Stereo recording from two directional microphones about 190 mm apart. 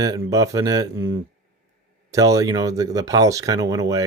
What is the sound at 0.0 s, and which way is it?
Speech, 20° right (ahead or behind).